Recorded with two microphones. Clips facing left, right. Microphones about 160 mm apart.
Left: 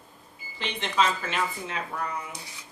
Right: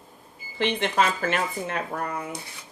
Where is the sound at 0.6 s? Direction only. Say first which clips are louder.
Right 3 dB; 55° right (ahead or behind).